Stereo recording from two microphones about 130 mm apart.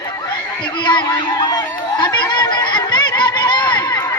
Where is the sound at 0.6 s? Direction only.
35° left (ahead or behind).